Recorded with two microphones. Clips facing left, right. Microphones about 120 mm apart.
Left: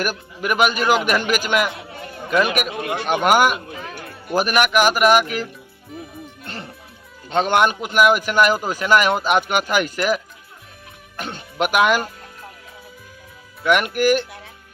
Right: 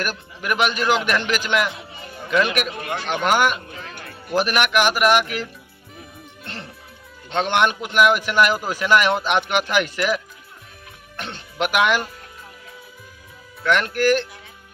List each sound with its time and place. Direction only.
0.0 s a man's voice: 5° left (ahead or behind)
1.7 s music: 60° left (ahead or behind)
2.1 s a sound: 5° left (ahead or behind)
2.6 s a man's voice: 5° left (ahead or behind)
3.7 s music: 75° left (ahead or behind)
4.4 s a man's voice: 5° left (ahead or behind)
6.4 s music: 5° left (ahead or behind)
7.3 s a man's voice: 5° left (ahead or behind)
11.2 s a man's voice: 5° left (ahead or behind)
13.7 s a man's voice: 10° left (ahead or behind)